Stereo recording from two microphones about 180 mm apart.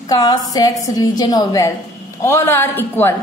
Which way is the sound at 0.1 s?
20° left (ahead or behind).